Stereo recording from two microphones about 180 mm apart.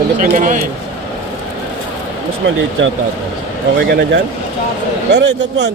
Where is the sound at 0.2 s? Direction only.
45° right (ahead or behind).